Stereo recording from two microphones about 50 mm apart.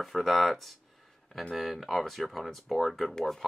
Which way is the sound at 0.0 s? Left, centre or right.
Centre.